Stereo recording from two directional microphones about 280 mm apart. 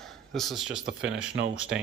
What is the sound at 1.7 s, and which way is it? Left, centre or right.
Speech, right.